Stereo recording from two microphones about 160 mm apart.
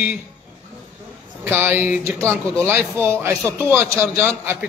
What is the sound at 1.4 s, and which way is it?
A man's voice, 15° right (ahead or behind).